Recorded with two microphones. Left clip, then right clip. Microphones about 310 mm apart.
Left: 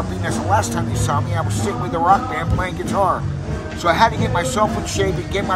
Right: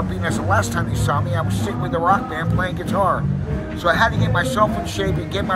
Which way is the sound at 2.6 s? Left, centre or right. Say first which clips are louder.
Even; centre.